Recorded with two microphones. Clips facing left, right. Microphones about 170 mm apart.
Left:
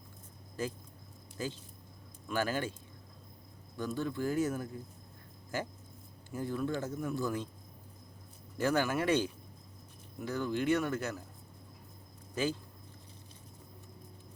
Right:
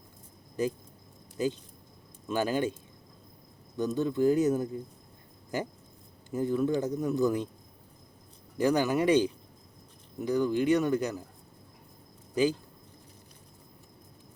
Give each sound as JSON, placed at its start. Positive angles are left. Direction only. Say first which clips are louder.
{"t": 0.6, "sound": "speech", "louder": "right 7 dB", "side_deg": -15}
{"t": 3.8, "sound": "speech", "louder": "right 8 dB", "side_deg": -20}
{"t": 8.5, "sound": "speech", "louder": "right 5 dB", "side_deg": -15}
{"t": 12.3, "sound": "speech", "louder": "right 7 dB", "side_deg": -15}